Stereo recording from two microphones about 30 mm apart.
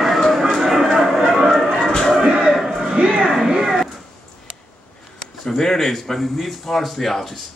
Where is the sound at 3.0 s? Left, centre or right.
Right.